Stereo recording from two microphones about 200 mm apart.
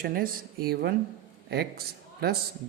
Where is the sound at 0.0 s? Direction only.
45° right (ahead or behind).